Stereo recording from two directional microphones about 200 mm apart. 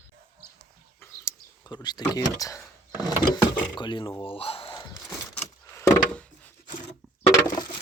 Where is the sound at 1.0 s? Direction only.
15° left (ahead or behind).